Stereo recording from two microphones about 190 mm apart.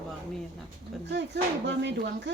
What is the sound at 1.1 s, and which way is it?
Speech, 60° right (ahead or behind).